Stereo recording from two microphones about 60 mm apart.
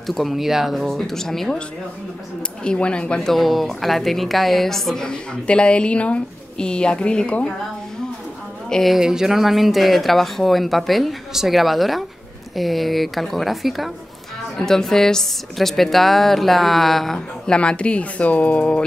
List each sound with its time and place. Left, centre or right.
0.0 s speech: centre
0.8 s a woman's voice: centre
2.6 s a woman's voice: centre
3.2 s a woman's voice: centre
8.6 s speech: centre
8.9 s speech: centre
14.6 s speech: centre
17.6 s speech: centre